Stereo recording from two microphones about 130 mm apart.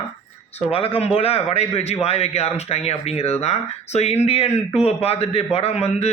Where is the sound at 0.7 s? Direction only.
45° left (ahead or behind).